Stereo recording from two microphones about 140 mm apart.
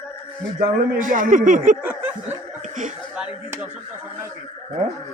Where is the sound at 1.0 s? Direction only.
75° right (ahead or behind).